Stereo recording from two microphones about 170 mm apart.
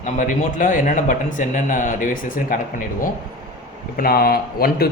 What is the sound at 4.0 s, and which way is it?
Speech, 65° left (ahead or behind).